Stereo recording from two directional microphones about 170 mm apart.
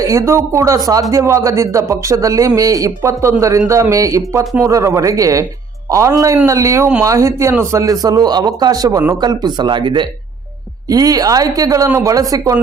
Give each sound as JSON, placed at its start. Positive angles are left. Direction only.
{"t": 0.0, "sound": "a man's voice", "side_deg": -20}